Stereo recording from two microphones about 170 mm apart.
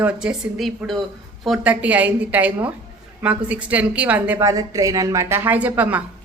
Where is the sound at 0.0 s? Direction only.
5° right (ahead or behind).